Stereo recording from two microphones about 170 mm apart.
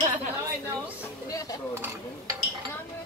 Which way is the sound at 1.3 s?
20° left (ahead or behind).